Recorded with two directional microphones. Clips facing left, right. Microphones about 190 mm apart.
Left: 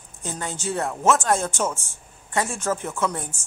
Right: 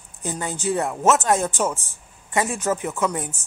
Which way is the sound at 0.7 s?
15° right (ahead or behind).